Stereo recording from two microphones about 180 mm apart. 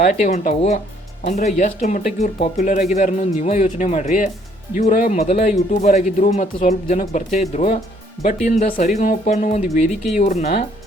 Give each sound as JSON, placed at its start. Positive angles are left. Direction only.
{"t": 0.0, "sound": "speech", "side_deg": 40}